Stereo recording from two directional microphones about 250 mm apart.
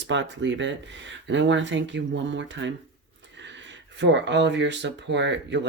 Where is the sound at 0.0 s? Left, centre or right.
Right.